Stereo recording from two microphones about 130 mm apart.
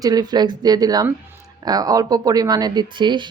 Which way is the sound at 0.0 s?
30° right (ahead or behind).